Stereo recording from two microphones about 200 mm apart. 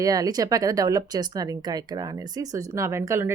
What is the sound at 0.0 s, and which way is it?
Speech, 20° right (ahead or behind).